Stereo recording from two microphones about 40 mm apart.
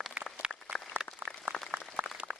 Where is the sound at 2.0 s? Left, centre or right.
Right.